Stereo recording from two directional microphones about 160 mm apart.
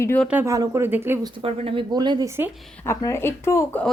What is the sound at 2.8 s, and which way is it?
A woman's voice, 15° left (ahead or behind).